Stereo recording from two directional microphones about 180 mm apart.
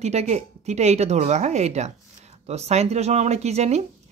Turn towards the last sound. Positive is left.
turn(degrees=-35)  # may be behind; listen again after turning